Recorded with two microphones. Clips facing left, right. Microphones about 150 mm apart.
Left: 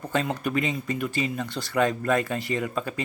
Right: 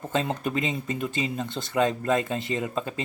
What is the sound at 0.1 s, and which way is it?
Speech, 20° right (ahead or behind).